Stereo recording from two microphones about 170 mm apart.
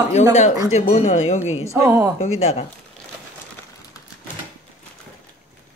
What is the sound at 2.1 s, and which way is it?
Speech, 35° left (ahead or behind).